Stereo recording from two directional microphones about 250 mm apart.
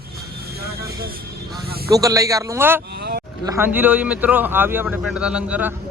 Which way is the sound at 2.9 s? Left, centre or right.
Right.